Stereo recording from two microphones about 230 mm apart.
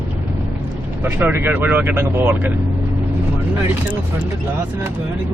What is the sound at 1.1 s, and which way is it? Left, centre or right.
Speech, centre.